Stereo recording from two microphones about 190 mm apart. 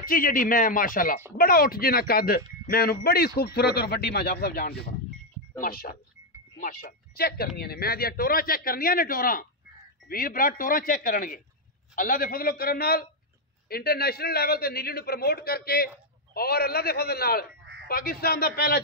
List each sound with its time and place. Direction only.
0.0 s a man's voice: 50° left (ahead or behind)